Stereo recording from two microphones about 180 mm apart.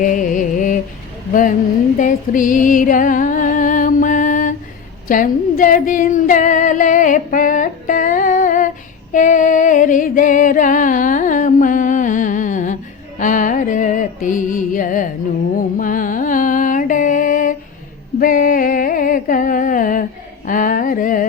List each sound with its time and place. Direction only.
0.0 s music: 45° left (ahead or behind)
1.3 s speech: 50° left (ahead or behind)
2.0 s music: 45° left (ahead or behind)
5.0 s female singing: 50° left (ahead or behind)
9.1 s music: 45° left (ahead or behind)
20.5 s a sound: 50° left (ahead or behind)